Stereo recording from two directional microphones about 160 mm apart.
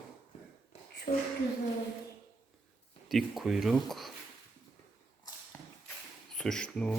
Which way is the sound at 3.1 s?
Centre (ahead or behind).